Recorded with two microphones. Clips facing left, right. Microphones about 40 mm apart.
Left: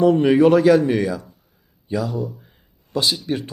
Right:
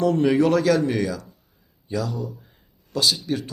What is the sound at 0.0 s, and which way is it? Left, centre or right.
Speech, centre.